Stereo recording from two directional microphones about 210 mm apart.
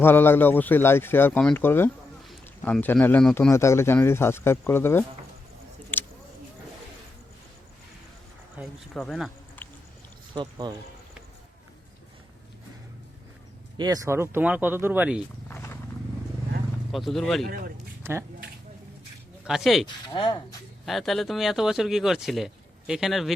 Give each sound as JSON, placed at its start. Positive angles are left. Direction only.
{"t": 0.0, "sound": "speech", "side_deg": 10}
{"t": 5.9, "sound": "a sound", "side_deg": 10}
{"t": 8.5, "sound": "speech", "side_deg": 0}
{"t": 10.3, "sound": "speech", "side_deg": -20}
{"t": 13.7, "sound": "speech", "side_deg": -15}
{"t": 15.4, "sound": "wild animals", "side_deg": 10}
{"t": 16.9, "sound": "speech", "side_deg": 0}
{"t": 18.0, "sound": "speech", "side_deg": -10}
{"t": 19.5, "sound": "speech", "side_deg": 0}
{"t": 20.1, "sound": "speech", "side_deg": 20}
{"t": 20.8, "sound": "speech", "side_deg": 0}